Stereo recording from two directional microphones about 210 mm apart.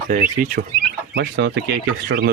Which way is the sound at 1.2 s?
60° right (ahead or behind).